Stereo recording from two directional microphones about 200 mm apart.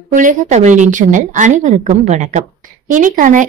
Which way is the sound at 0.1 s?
40° right (ahead or behind).